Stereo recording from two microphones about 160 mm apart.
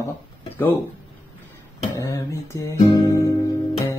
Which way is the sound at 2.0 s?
20° left (ahead or behind).